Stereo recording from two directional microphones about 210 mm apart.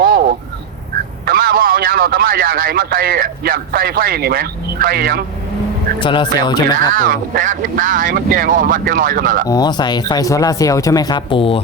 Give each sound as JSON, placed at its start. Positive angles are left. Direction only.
{"t": 0.0, "sound": "a sound", "side_deg": -45}
{"t": 1.2, "sound": "a man's voice", "side_deg": -45}
{"t": 6.0, "sound": "speech", "side_deg": 25}
{"t": 6.9, "sound": "speech", "side_deg": -40}
{"t": 9.5, "sound": "speech", "side_deg": 20}